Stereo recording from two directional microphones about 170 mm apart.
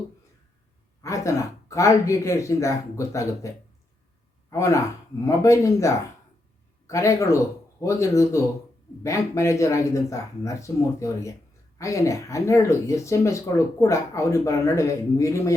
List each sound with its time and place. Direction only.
1.0 s speech: 15° left (ahead or behind)